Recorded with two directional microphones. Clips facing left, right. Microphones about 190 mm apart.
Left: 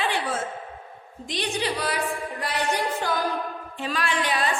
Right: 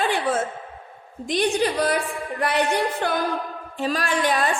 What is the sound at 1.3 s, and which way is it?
Speech, 50° right (ahead or behind).